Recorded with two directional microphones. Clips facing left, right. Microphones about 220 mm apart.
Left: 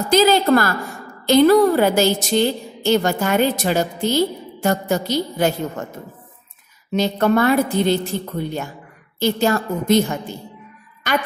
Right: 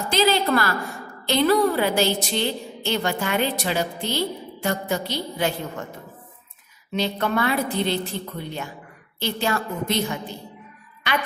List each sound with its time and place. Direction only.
0.1 s a woman's voice: 45° left (ahead or behind)
6.9 s a woman's voice: 45° left (ahead or behind)
9.2 s a woman's voice: 45° left (ahead or behind)